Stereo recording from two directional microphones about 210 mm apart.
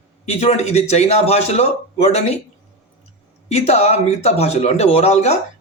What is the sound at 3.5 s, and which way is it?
A man's voice, 30° left (ahead or behind).